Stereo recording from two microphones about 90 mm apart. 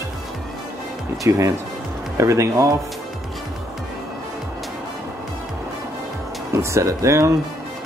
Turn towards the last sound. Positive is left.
turn(degrees=-35)  # may be behind; listen again after turning